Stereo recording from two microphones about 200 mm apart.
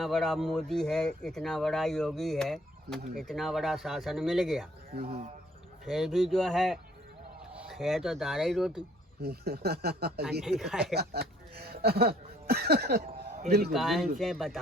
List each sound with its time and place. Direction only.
0.0 s speech: centre (ahead or behind)
5.8 s speech: centre (ahead or behind)
9.2 s speech: 55° right (ahead or behind)
10.4 s speech: centre (ahead or behind)
10.9 s speech: 55° right (ahead or behind)
13.7 s speech: centre (ahead or behind)